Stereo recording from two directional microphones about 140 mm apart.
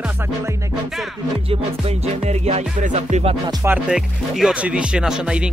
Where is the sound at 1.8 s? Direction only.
50° right (ahead or behind).